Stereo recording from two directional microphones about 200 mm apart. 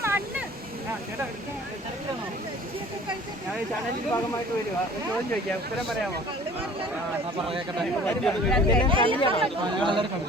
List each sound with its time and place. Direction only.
0.0 s boat: 10° right (ahead or behind)
7.8 s speech: 5° left (ahead or behind)
8.9 s speech: 25° right (ahead or behind)